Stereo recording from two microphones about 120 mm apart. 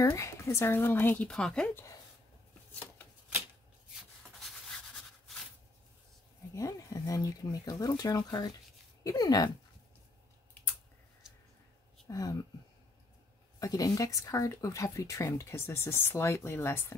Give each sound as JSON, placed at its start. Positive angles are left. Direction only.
{"t": 0.0, "sound": "speech", "side_deg": 25}
{"t": 3.3, "sound": "shuffling cards", "side_deg": -20}
{"t": 3.9, "sound": "rub", "side_deg": 0}
{"t": 6.5, "sound": "speech", "side_deg": 30}
{"t": 12.1, "sound": "speech", "side_deg": 30}
{"t": 13.6, "sound": "speech", "side_deg": 30}